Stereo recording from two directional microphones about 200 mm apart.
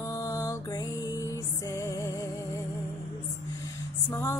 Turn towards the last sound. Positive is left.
turn(degrees=15)  # may be behind; listen again after turning